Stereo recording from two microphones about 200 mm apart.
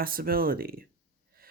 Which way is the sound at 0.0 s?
45° right (ahead or behind).